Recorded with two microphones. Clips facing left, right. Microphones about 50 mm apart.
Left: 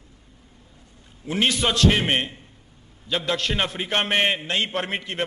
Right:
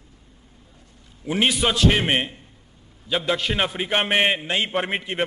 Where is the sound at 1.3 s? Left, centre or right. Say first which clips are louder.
Right 1 dB; centre.